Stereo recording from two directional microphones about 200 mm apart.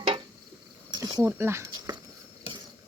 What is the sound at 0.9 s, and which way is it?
Speech, 20° right (ahead or behind).